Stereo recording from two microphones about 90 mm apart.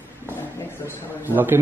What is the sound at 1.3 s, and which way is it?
Speech, 20° right (ahead or behind).